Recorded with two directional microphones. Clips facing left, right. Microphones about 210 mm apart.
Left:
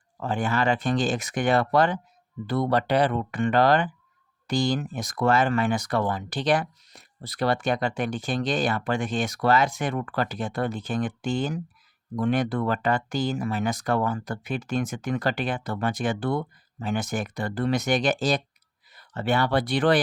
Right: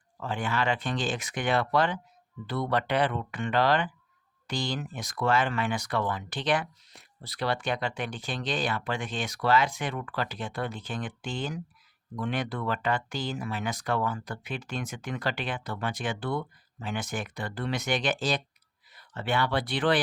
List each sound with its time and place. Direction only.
0.2 s speech: 45° left (ahead or behind)